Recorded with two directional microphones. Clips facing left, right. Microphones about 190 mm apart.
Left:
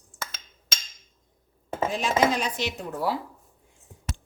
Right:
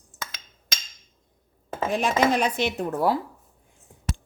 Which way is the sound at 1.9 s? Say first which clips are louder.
Right 2 dB; 60° right (ahead or behind).